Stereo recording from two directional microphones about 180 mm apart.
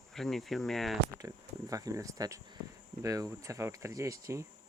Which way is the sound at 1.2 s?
20° right (ahead or behind).